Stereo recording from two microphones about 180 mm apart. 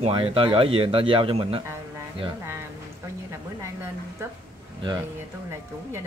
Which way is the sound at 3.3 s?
15° right (ahead or behind).